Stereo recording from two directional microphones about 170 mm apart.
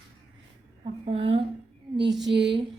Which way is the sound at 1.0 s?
35° right (ahead or behind).